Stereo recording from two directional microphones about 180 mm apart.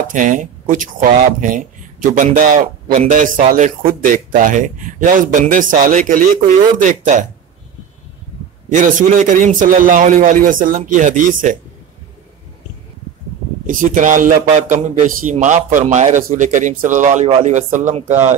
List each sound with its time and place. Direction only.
0.1 s speech: 45° right (ahead or behind)
8.6 s speech: 45° right (ahead or behind)
13.7 s speech: 45° right (ahead or behind)